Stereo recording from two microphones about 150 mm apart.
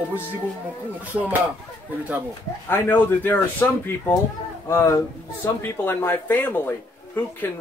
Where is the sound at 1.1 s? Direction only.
10° right (ahead or behind).